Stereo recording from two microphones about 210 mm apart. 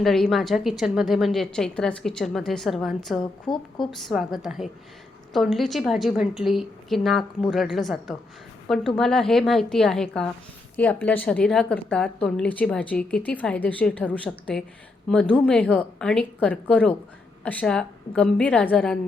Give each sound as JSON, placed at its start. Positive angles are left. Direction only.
{"t": 0.0, "sound": "a woman's voice", "side_deg": 0}
{"t": 3.2, "sound": "a woman's voice", "side_deg": 20}
{"t": 3.9, "sound": "a woman's voice", "side_deg": 0}